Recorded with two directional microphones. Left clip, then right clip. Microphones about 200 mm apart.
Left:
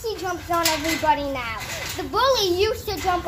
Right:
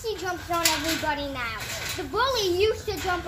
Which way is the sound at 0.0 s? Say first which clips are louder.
Left 3 dB; 20° left (ahead or behind).